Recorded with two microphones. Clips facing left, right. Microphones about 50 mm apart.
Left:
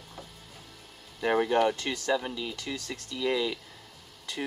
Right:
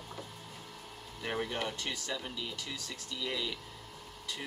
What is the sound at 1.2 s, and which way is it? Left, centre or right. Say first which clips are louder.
Speech: left 11 dB; left.